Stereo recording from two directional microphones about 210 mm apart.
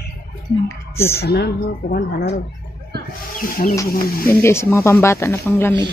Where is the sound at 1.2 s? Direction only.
50° left (ahead or behind).